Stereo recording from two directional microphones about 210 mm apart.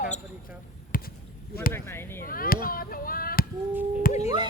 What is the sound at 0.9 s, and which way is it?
Basketball bounce, 40° left (ahead or behind).